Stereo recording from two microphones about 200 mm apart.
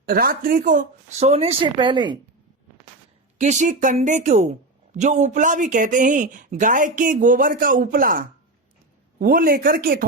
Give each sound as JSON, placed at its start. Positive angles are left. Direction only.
{"t": 0.0, "sound": "speech", "side_deg": -45}
{"t": 3.3, "sound": "speech", "side_deg": -35}